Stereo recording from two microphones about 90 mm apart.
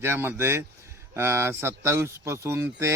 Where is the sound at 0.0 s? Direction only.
25° right (ahead or behind).